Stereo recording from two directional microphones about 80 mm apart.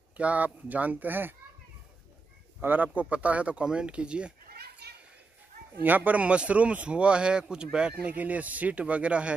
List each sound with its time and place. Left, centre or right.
0.2 s speech: centre
2.6 s speech: right
5.8 s speech: right